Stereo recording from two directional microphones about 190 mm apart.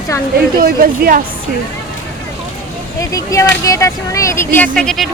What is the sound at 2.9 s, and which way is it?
Speech, 15° left (ahead or behind).